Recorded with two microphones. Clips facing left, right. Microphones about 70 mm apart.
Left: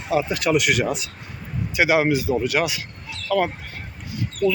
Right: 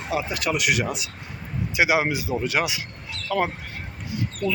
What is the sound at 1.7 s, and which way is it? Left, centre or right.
Speech, centre.